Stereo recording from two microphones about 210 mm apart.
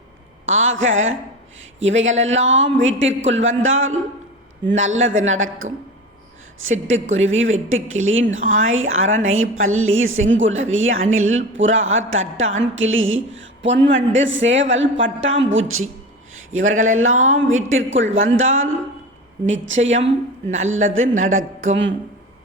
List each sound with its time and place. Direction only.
0.4 s a woman's voice: 70° right (ahead or behind)
16.3 s a sound: 70° right (ahead or behind)
16.8 s a woman's voice: 75° right (ahead or behind)
17.2 s a woman's voice: 35° right (ahead or behind)
17.5 s a woman's voice: 70° right (ahead or behind)
19.7 s a woman's voice: 30° right (ahead or behind)
20.8 s a woman's voice: 70° right (ahead or behind)
21.2 s a woman's voice: 40° right (ahead or behind)